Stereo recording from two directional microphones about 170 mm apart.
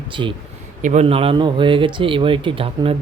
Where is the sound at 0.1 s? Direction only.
30° right (ahead or behind).